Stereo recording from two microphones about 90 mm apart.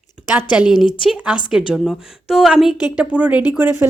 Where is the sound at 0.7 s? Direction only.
65° left (ahead or behind).